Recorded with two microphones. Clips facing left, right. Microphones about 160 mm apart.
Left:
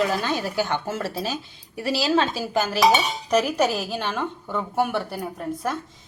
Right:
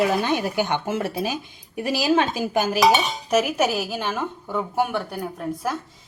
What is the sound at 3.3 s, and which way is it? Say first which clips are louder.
A woman's voice: even; 5° right (ahead or behind).